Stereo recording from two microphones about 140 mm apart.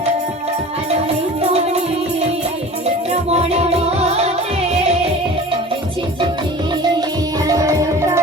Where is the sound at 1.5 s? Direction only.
45° right (ahead or behind).